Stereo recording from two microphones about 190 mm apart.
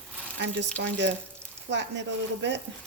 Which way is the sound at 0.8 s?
70° right (ahead or behind).